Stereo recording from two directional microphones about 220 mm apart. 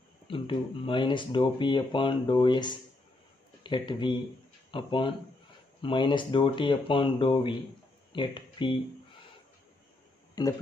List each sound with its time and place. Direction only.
0.3 s speech: 20° left (ahead or behind)
10.4 s speech: 15° left (ahead or behind)